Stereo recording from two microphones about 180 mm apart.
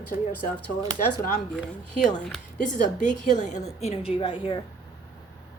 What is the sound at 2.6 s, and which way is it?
A woman's voice, 45° left (ahead or behind).